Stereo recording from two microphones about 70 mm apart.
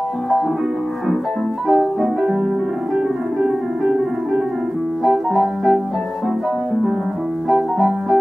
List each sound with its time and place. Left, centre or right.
1.7 s music: centre
3.4 s piano: centre
7.4 s music: centre